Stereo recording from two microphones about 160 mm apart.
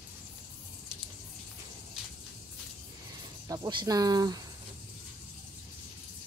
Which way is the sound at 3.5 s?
25° right (ahead or behind).